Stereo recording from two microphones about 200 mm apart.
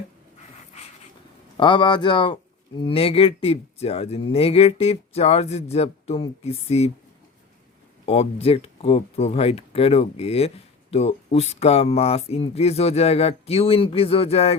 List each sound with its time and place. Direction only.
1.5 s speech: 25° left (ahead or behind)
8.0 s speech: 30° left (ahead or behind)